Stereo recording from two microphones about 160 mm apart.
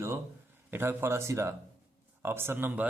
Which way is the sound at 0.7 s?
15° right (ahead or behind).